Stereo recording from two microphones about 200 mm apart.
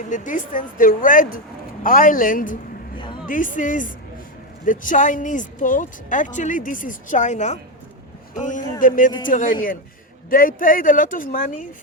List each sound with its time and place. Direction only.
0.1 s a man's voice: 40° left (ahead or behind)